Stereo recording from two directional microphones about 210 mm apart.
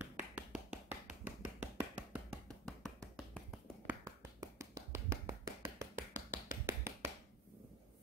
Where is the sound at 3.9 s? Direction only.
15° right (ahead or behind).